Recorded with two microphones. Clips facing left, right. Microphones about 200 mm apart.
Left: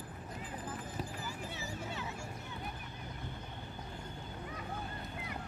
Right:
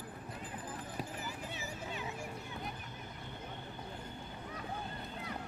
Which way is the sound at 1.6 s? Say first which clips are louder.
Left 1 dB; 15° right (ahead or behind).